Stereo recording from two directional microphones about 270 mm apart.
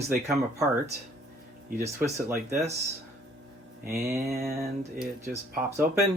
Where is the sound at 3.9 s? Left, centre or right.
Centre.